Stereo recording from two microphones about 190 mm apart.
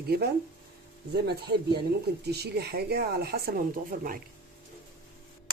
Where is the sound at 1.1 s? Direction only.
60° right (ahead or behind).